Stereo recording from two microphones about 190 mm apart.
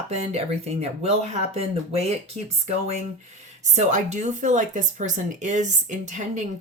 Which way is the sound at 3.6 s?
40° right (ahead or behind).